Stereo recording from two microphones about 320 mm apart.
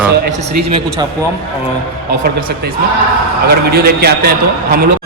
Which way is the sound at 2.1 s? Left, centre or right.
Right.